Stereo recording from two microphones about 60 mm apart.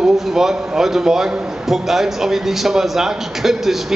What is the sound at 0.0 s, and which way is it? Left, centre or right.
A man's voice, centre.